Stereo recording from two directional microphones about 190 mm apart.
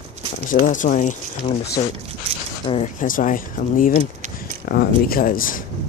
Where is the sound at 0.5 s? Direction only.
45° left (ahead or behind).